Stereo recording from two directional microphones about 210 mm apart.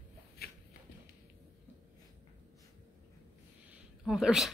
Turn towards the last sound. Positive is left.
turn(degrees=0)  # may be behind; listen again after turning